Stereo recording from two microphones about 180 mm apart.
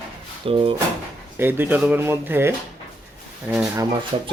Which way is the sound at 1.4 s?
10° right (ahead or behind).